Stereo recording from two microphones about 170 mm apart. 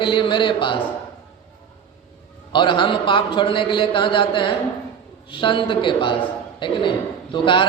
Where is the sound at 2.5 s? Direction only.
30° left (ahead or behind).